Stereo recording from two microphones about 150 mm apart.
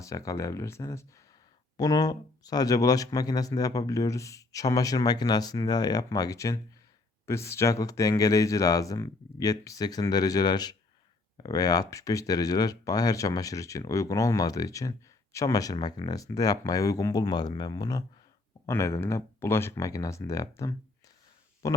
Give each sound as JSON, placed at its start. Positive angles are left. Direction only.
{"t": 0.0, "sound": "speech", "side_deg": 20}